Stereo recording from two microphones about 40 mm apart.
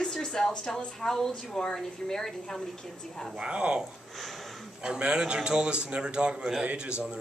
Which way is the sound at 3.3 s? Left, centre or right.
Right.